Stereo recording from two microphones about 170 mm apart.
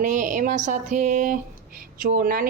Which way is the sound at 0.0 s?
50° right (ahead or behind).